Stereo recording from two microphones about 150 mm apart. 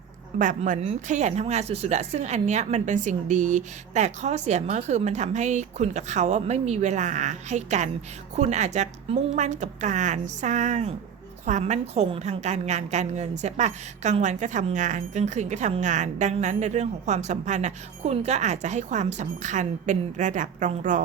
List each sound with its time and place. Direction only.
0.3 s a woman's voice: 60° right (ahead or behind)